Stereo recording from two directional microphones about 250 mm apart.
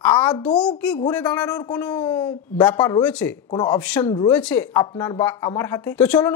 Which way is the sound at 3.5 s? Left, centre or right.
Centre.